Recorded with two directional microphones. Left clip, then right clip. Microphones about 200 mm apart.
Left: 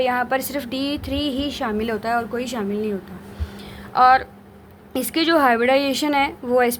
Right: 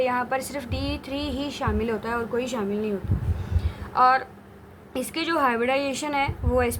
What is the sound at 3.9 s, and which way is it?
A woman's voice, 30° left (ahead or behind).